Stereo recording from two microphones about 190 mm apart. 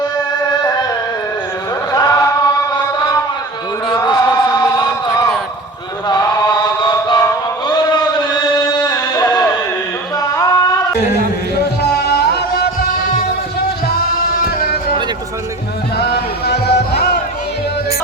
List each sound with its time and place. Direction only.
1.9 s chant: 20° left (ahead or behind)
3.8 s chant: 20° left (ahead or behind)
6.1 s music: 20° left (ahead or behind)
10.2 s a sound: 20° left (ahead or behind)
12.0 s music: 55° left (ahead or behind)
16.0 s a sound: 60° left (ahead or behind)